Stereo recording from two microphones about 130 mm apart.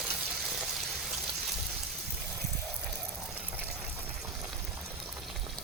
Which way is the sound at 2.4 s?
Centre (ahead or behind).